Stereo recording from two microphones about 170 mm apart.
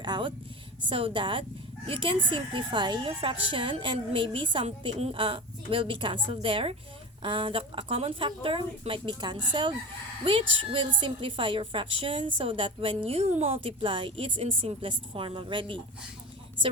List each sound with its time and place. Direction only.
0.0 s a woman's voice: 25° right (ahead or behind)